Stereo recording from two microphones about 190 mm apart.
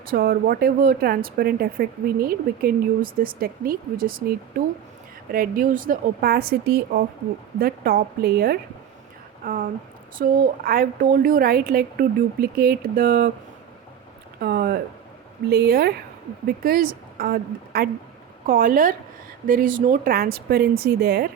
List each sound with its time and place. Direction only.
0.0 s speech: 50° right (ahead or behind)
14.4 s speech: 55° right (ahead or behind)